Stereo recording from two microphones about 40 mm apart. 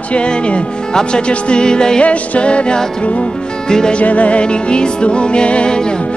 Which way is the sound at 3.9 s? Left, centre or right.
Left.